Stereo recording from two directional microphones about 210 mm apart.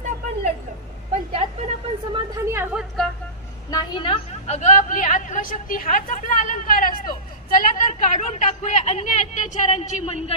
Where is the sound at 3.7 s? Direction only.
20° left (ahead or behind).